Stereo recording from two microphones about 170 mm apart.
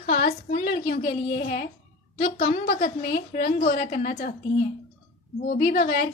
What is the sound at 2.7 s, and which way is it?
A woman's voice, 55° left (ahead or behind).